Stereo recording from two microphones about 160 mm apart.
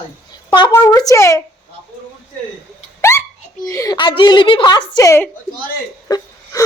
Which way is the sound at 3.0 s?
15° left (ahead or behind).